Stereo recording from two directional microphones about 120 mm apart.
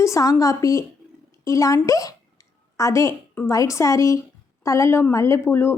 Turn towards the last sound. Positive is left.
turn(degrees=20)  # may be behind; listen again after turning